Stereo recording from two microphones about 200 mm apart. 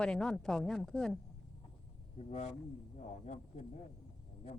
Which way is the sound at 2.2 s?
30° left (ahead or behind).